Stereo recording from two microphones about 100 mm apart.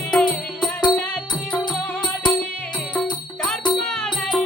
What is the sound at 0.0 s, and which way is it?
Music, 10° left (ahead or behind).